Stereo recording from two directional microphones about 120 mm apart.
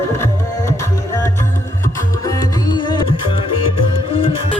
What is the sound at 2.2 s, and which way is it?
Music, 30° left (ahead or behind).